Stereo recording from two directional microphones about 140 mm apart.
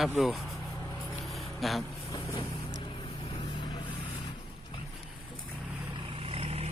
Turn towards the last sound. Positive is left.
turn(degrees=-45)  # may be behind; listen again after turning